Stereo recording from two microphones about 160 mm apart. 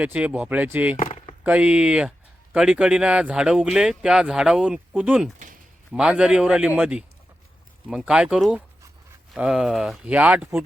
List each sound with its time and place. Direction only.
0.0 s speech: 10° right (ahead or behind)
0.9 s chop: 50° left (ahead or behind)
1.5 s speech: 5° right (ahead or behind)